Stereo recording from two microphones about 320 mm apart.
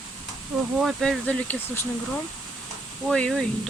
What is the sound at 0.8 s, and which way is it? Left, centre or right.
Speech, centre.